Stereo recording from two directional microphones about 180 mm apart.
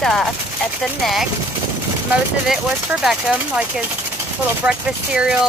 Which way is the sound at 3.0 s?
5° right (ahead or behind).